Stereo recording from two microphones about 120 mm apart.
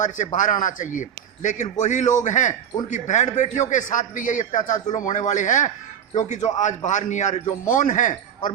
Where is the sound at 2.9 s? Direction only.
80° left.